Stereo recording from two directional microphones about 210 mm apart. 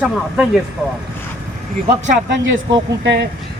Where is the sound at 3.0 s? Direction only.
55° right (ahead or behind).